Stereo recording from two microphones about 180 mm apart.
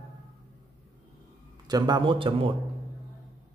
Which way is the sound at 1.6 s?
20° right (ahead or behind).